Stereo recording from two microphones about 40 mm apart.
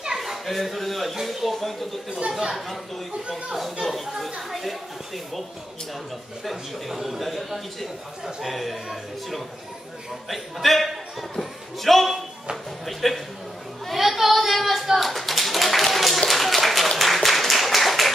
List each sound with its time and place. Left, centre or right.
0.2 s a woman's voice: centre
2.0 s speech: right
3.8 s a woman's voice: centre
6.4 s a woman's voice: centre
10.3 s a man's voice: centre
13.9 s clapping: centre
17.0 s a sound: centre